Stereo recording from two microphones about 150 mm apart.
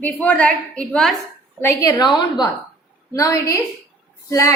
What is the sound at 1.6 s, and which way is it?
A woman's voice, 20° left (ahead or behind).